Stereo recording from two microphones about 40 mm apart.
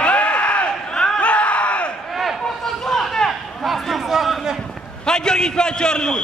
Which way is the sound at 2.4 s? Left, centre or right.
Centre.